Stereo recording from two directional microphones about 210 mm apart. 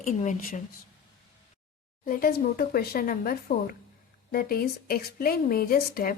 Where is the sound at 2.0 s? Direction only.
45° left (ahead or behind).